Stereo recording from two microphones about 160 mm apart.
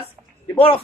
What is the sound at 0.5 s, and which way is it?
Speech, 35° left (ahead or behind).